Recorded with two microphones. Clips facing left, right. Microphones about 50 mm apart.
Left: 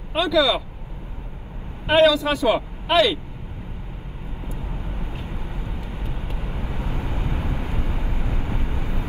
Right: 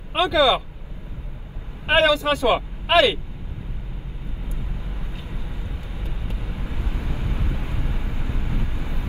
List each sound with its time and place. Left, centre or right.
0.1 s speech: right
1.9 s speech: right
4.6 s vehicle: left